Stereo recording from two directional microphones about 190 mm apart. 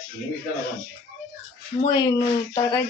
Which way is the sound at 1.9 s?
20° left (ahead or behind).